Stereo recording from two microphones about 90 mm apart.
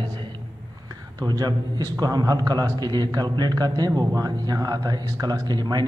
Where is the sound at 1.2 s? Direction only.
45° right (ahead or behind).